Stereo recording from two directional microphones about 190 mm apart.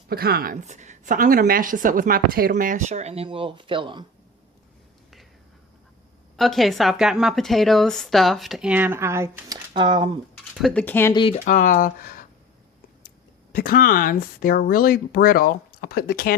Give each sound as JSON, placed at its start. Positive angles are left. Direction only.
{"t": 0.1, "sound": "a woman's voice", "side_deg": -55}
{"t": 0.6, "sound": "a woman's voice", "side_deg": -40}
{"t": 6.3, "sound": "a woman's voice", "side_deg": 0}
{"t": 10.5, "sound": "speech", "side_deg": 0}
{"t": 11.1, "sound": "speech", "side_deg": 25}
{"t": 11.4, "sound": "speech", "side_deg": 45}
{"t": 13.5, "sound": "speech", "side_deg": 50}